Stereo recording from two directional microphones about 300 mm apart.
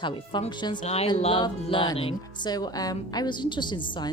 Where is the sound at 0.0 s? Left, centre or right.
Centre.